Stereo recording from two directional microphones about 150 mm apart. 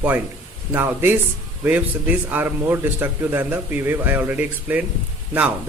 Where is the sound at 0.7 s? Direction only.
15° right (ahead or behind).